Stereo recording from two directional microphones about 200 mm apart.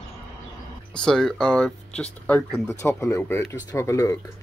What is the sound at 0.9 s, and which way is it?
Speech, 5° left (ahead or behind).